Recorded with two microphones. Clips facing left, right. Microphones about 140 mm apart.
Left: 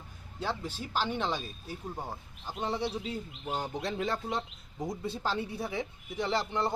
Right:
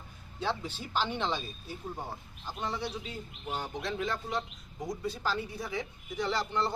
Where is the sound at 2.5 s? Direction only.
20° left (ahead or behind).